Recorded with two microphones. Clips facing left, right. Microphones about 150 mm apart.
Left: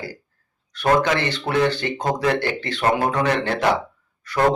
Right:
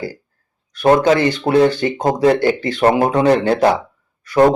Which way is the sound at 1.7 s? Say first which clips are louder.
Right 6 dB; 10° right (ahead or behind).